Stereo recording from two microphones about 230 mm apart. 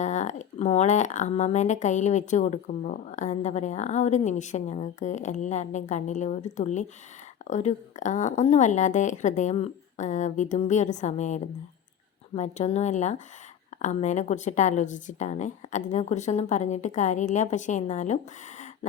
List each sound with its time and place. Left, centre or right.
0.0 s speech: left